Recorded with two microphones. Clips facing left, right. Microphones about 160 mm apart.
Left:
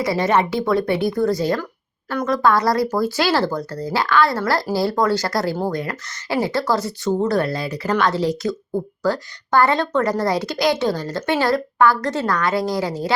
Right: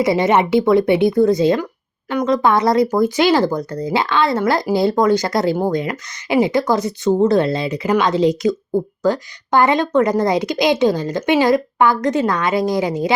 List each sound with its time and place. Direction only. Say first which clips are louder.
0.0 s speech: right 4 dB; 20° right (ahead or behind)